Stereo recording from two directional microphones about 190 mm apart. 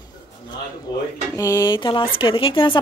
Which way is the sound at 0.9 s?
20° left (ahead or behind).